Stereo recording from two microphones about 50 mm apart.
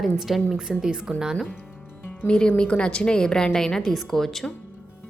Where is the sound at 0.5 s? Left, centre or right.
Centre.